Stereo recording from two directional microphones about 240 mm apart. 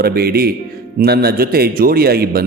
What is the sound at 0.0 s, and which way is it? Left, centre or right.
A man's voice, right.